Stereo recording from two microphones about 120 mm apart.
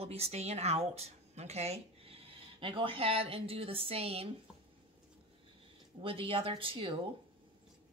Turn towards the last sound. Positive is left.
turn(degrees=-45)  # may be behind; listen again after turning